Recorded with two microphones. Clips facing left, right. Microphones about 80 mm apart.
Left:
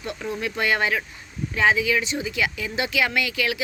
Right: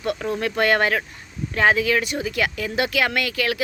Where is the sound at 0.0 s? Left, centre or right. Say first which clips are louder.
Right 5 dB; right.